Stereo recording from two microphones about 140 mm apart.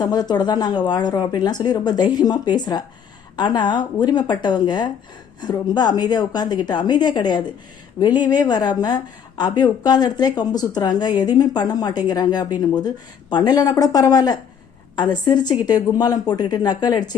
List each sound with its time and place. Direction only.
0.0 s a woman's voice: 30° left (ahead or behind)